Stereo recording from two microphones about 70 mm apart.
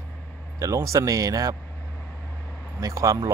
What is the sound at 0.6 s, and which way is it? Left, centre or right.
Speech, right.